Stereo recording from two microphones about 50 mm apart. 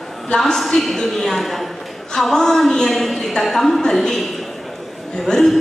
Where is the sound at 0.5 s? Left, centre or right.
Centre.